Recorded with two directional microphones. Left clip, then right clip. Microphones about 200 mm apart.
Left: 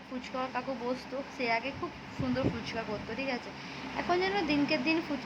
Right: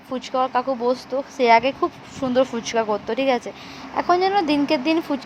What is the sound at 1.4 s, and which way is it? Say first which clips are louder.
A woman's voice: right 17 dB; 45° right (ahead or behind).